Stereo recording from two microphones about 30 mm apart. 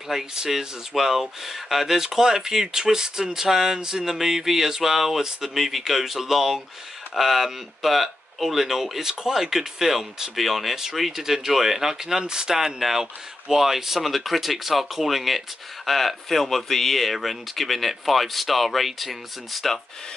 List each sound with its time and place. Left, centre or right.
0.1 s speech: centre
10.3 s speech: centre; by 12.5 s right
12.5 s speech: centre